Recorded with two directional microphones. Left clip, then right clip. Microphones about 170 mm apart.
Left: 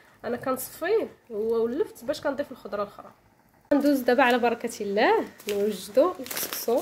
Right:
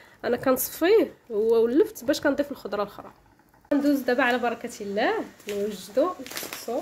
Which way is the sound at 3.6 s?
20° left (ahead or behind).